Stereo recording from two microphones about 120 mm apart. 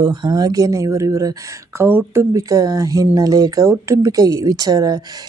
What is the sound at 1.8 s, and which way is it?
Speech, 20° right (ahead or behind).